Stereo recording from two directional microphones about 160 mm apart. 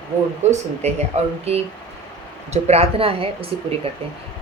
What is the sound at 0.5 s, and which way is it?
Speech, 45° right (ahead or behind).